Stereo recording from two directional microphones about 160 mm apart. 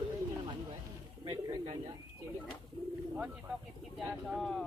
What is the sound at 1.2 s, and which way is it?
Bird, 30° right (ahead or behind).